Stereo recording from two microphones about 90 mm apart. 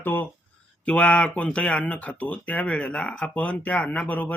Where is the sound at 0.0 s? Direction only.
20° left (ahead or behind).